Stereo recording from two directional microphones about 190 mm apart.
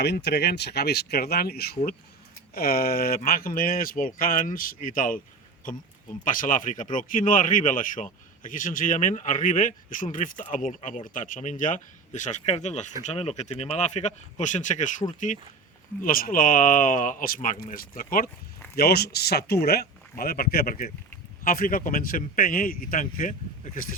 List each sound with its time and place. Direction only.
0.0 s a man's voice: 60° left (ahead or behind); by 5.2 s 45° left (ahead or behind)
6.2 s a man's voice: 45° left (ahead or behind)